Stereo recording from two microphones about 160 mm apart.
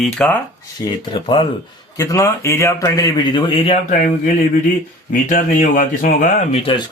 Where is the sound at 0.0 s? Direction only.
5° left (ahead or behind).